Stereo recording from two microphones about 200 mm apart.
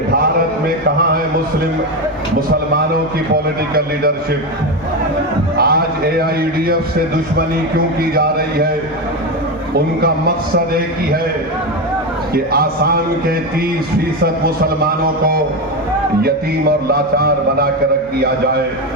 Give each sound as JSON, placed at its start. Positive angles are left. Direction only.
{"t": 3.3, "sound": "music", "side_deg": -50}
{"t": 5.5, "sound": "music", "side_deg": -50}
{"t": 12.3, "sound": "music", "side_deg": -50}
{"t": 14.4, "sound": "music", "side_deg": -50}